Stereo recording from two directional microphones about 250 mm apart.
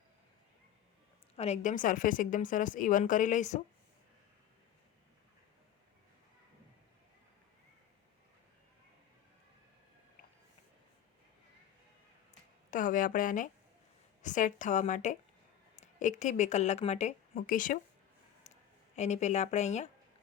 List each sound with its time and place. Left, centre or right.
1.4 s a woman's voice: left
12.7 s a woman's voice: left
18.5 s a sound: left
18.9 s a woman's voice: left